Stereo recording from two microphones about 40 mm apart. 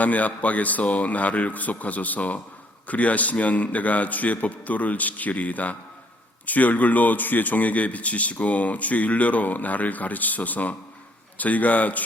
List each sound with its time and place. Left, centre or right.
0.0 s a man's voice: left